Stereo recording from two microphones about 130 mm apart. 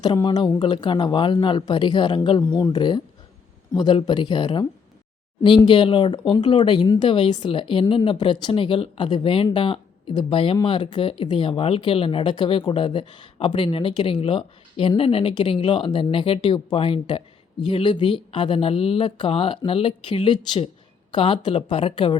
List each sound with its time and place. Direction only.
0.0 s speech: 35° left (ahead or behind)